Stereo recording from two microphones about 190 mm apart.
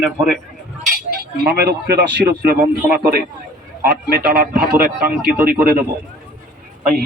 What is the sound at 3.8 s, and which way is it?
Speech, 50° right (ahead or behind).